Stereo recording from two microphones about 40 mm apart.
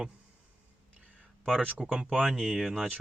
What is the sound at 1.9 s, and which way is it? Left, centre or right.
Speech, right.